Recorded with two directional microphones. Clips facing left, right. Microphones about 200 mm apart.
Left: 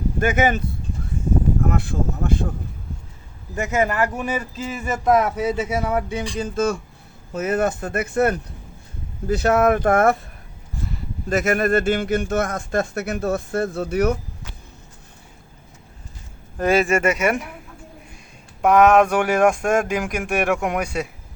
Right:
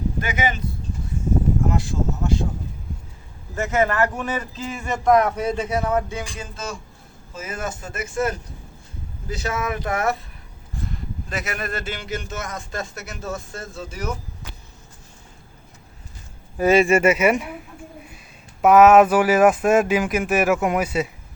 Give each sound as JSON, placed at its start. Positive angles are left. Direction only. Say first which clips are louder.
{"t": 0.2, "sound": "speech", "louder": "left 8 dB", "side_deg": 50}
{"t": 1.6, "sound": "speech", "louder": "left 1 dB", "side_deg": 60}
{"t": 3.5, "sound": "speech", "louder": "even", "side_deg": 15}
{"t": 7.3, "sound": "a man's voice", "louder": "left 9 dB", "side_deg": 60}
{"t": 11.3, "sound": "a man's voice", "louder": "left 11 dB", "side_deg": 50}
{"t": 16.6, "sound": "speech", "louder": "right 2 dB", "side_deg": -5}
{"t": 18.6, "sound": "speech", "louder": "right 2 dB", "side_deg": -5}